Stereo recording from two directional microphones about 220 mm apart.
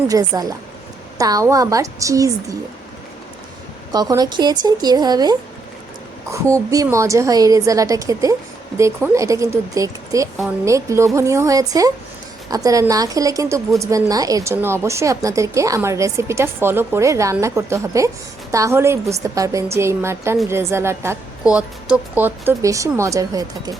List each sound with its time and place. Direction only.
0.1 s a woman's voice: 15° right (ahead or behind)
3.9 s a woman's voice: 15° right (ahead or behind)